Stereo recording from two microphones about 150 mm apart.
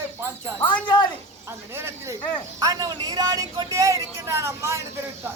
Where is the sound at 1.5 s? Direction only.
15° right (ahead or behind).